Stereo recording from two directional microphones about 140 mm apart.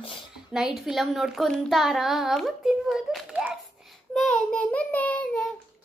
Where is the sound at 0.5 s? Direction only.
5° right (ahead or behind).